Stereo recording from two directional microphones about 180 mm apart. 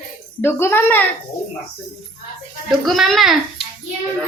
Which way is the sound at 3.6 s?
35° left (ahead or behind).